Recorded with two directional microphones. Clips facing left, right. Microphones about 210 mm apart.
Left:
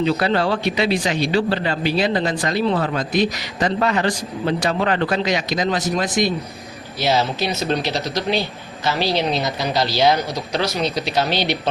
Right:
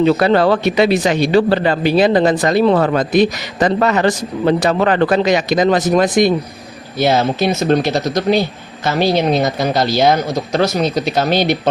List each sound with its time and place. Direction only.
0.0 s speech: 50° right (ahead or behind)
4.4 s speech: 60° right (ahead or behind)